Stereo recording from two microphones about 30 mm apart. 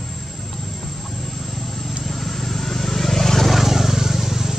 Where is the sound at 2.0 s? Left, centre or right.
Centre.